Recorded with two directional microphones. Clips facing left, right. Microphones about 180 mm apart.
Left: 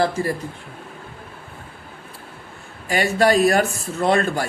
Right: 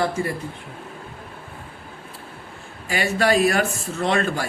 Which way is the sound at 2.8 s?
40° left (ahead or behind).